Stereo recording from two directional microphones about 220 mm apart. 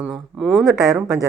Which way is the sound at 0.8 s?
15° right (ahead or behind).